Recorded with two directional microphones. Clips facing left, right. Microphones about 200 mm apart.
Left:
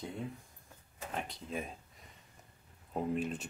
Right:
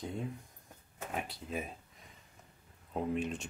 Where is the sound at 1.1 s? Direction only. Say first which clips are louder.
Right 1 dB; 5° right (ahead or behind).